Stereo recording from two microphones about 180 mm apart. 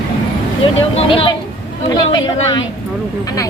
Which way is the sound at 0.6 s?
30° left (ahead or behind).